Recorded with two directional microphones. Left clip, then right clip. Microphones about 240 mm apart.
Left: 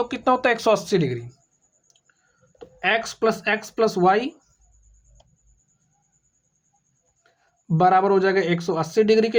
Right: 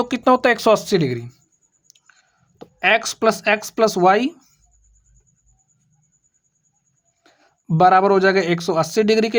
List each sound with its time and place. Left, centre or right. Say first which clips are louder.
0.0 s speech: right 4 dB; right
2.6 s speech: right 5 dB; right
7.3 s speech: right 2 dB; right